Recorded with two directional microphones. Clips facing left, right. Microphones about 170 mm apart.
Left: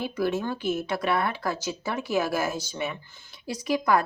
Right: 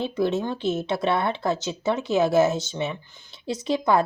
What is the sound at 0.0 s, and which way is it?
Speech, 25° right (ahead or behind).